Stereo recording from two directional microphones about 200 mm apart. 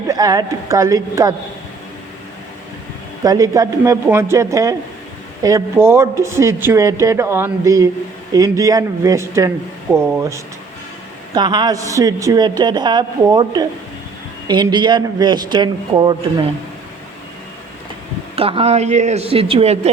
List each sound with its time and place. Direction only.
0.1 s speech: 20° right (ahead or behind)
3.2 s a man's voice: 15° right (ahead or behind)
18.3 s a woman's voice: 30° right (ahead or behind)